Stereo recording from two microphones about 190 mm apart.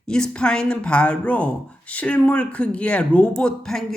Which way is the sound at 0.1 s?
5° left (ahead or behind).